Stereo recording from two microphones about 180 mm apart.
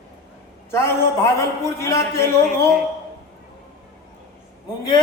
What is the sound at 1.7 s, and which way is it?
Speech, 15° left (ahead or behind).